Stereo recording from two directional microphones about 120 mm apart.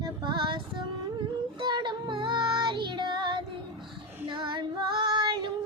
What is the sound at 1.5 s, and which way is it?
Child singing, 40° right (ahead or behind).